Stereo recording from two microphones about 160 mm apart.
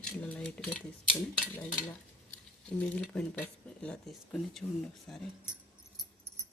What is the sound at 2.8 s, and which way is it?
Speech, 10° left (ahead or behind).